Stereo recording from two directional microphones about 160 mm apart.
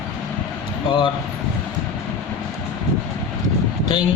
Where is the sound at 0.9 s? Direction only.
30° left (ahead or behind).